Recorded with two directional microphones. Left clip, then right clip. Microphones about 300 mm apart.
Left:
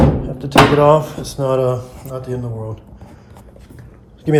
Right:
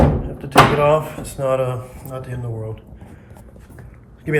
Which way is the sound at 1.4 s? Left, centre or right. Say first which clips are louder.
Left 3 dB; centre.